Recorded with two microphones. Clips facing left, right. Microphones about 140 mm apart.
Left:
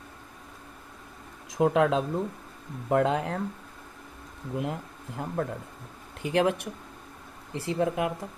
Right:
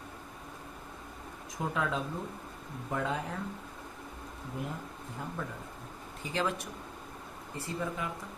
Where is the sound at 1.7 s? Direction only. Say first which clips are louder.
Left 9 dB; 80° left.